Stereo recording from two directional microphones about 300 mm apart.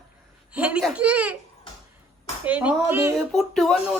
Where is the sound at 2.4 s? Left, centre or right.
Centre.